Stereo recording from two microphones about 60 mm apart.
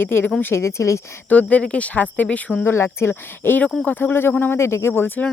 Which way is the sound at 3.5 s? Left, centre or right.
Left.